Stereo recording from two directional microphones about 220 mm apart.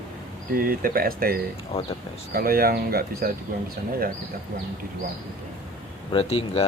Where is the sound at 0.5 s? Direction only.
40° right (ahead or behind).